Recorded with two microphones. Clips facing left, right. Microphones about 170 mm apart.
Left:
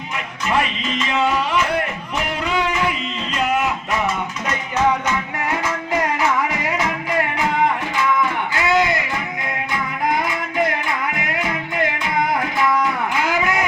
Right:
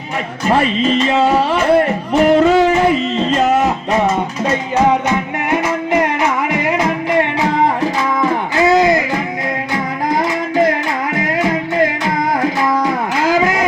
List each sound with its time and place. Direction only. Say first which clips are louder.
0.4 s music: right 8 dB; 35° right (ahead or behind)
4.0 s music: right 7 dB; 25° right (ahead or behind)
8.2 s a sound: right 7 dB; 35° right (ahead or behind)
9.7 s music: right 3 dB; 40° right (ahead or behind)